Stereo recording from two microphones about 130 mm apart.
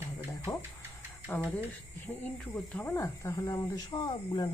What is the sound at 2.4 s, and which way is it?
Speech, 5° left (ahead or behind).